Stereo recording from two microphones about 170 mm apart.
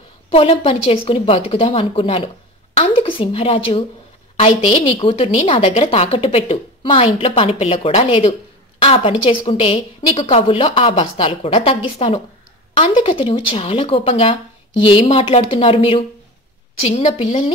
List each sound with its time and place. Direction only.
0.3 s a woman's voice: 35° left (ahead or behind)